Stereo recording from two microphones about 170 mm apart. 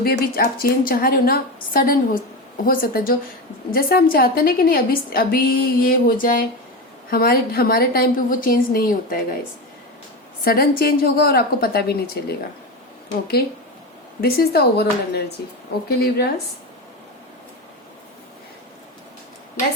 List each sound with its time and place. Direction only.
0.0 s a woman's voice: 60° left (ahead or behind)
10.4 s a woman's voice: 60° left (ahead or behind)
14.2 s a woman's voice: 65° left (ahead or behind)